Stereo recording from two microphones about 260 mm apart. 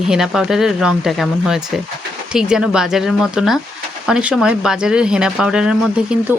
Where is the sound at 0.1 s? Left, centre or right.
Centre.